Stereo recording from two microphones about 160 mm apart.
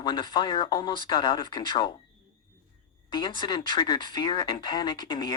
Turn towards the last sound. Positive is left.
turn(degrees=25)  # may be behind; listen again after turning